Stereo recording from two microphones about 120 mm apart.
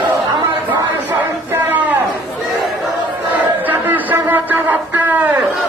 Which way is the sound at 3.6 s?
15° right (ahead or behind).